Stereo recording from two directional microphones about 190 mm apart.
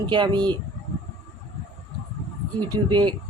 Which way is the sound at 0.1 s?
25° right (ahead or behind).